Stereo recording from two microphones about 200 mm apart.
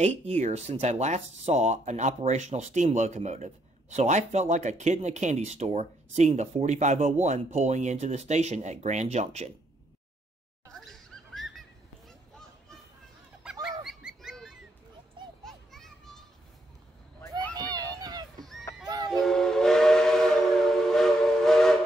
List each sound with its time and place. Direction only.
0.0 s speech: 35° right (ahead or behind)
10.8 s a sound: centre (ahead or behind)
13.4 s fowl: 5° right (ahead or behind)
15.4 s children playing: centre (ahead or behind)
18.4 s a sound: centre (ahead or behind)
19.0 s train whistle: centre (ahead or behind)